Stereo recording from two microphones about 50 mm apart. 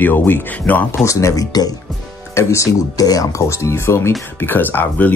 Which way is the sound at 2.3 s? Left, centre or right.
Left.